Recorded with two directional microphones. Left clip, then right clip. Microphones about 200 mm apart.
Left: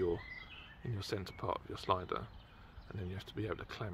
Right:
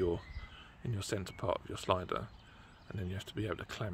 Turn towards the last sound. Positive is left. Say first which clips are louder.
# right 2 dB
turn(degrees=-30)  # may be behind; listen again after turning